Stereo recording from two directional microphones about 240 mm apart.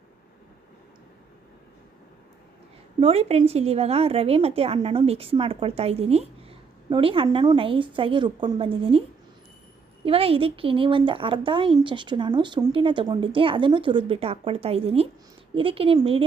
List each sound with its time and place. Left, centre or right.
3.0 s speech: right